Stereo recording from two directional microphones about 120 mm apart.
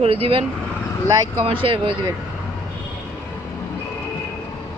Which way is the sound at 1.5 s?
45° right (ahead or behind).